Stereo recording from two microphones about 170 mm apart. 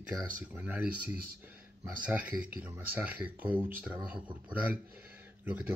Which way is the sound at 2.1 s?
10° right (ahead or behind).